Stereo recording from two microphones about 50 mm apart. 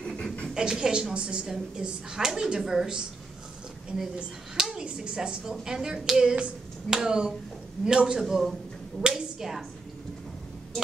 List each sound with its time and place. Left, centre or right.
0.0 s a sound: centre
0.6 s a woman's voice: centre
4.6 s a woman's voice: centre